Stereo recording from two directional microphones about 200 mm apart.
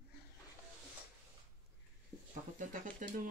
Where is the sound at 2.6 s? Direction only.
40° right (ahead or behind).